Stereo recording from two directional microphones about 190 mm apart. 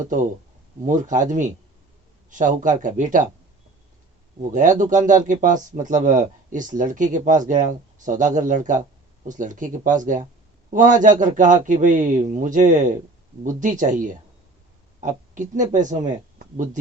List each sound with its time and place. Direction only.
0.9 s speech: 40° right (ahead or behind)
4.5 s speech: 40° right (ahead or behind)